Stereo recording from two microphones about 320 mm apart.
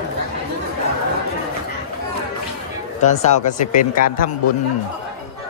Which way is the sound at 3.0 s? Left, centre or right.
Left.